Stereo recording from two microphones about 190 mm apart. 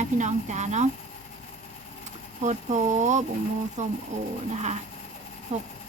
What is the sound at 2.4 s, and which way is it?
Speech, 40° right (ahead or behind).